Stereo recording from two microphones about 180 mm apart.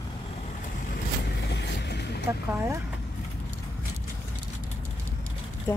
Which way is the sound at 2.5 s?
15° right (ahead or behind).